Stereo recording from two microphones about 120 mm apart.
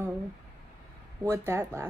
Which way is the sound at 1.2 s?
20° right (ahead or behind).